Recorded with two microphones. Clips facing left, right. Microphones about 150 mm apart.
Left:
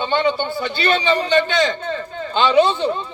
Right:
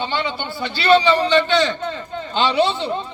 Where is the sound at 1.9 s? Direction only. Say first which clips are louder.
Left 2 dB; 50° left (ahead or behind).